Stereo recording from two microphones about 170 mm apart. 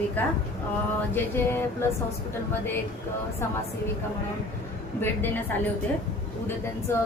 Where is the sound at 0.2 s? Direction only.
10° left (ahead or behind).